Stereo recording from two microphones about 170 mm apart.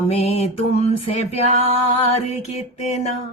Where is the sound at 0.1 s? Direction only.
40° left (ahead or behind).